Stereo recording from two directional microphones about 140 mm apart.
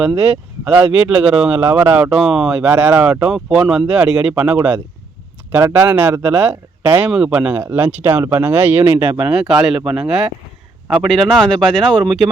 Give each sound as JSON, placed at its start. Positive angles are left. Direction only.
{"t": 0.2, "sound": "speech", "side_deg": -5}